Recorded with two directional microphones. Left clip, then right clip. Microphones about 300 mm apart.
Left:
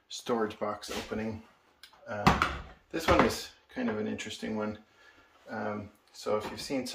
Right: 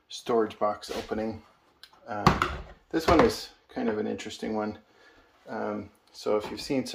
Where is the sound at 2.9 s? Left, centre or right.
Centre.